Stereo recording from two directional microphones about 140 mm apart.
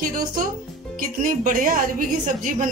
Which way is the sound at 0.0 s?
80° right.